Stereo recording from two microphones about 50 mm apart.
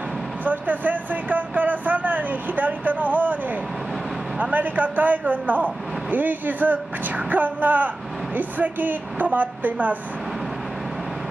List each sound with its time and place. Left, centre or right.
0.5 s speech: right
4.4 s speech: right